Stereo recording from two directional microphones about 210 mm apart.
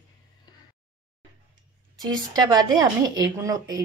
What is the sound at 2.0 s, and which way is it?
A woman's voice, 20° right (ahead or behind).